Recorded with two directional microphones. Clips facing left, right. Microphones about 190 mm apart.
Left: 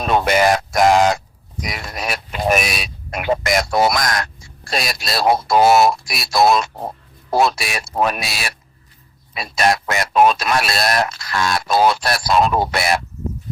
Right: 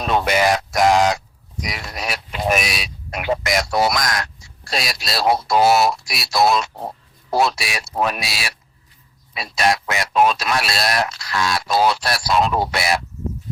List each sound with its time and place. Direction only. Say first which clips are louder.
0.0 s speech: left 2 dB; 45° left (ahead or behind)